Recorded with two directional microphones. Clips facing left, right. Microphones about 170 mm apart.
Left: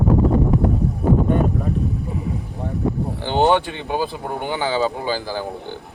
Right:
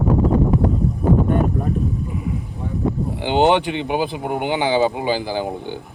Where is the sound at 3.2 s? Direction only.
15° right (ahead or behind).